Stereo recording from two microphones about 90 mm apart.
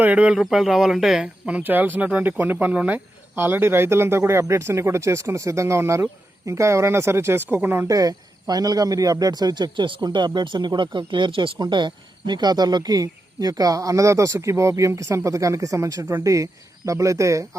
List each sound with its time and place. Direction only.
0.0 s speech: 15° right (ahead or behind)
1.5 s speech: 20° right (ahead or behind)
7.9 s speech: 40° right (ahead or behind); by 11.5 s 70° right (ahead or behind)
11.6 s speech: 60° right (ahead or behind); by 17.6 s 35° right (ahead or behind)